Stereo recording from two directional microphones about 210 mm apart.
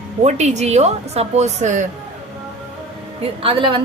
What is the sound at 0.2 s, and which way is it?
A woman's voice, 35° right (ahead or behind).